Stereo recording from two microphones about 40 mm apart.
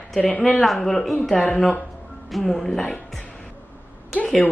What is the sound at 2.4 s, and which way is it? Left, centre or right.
Speech, centre.